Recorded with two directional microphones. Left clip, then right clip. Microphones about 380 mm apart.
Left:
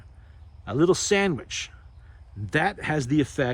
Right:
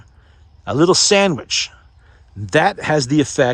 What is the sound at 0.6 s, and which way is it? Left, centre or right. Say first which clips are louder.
Speech: right 8 dB; centre.